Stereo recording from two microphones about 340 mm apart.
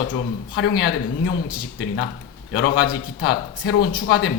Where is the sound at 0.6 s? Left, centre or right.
Left.